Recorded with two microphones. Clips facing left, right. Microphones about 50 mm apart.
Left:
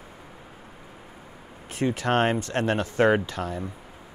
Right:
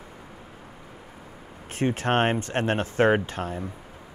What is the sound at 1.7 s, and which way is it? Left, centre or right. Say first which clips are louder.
Speech: even; right.